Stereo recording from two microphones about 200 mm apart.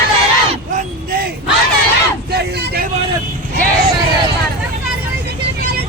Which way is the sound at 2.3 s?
55° right (ahead or behind).